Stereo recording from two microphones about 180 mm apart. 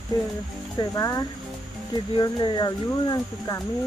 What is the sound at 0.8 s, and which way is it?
Speech, 20° left (ahead or behind).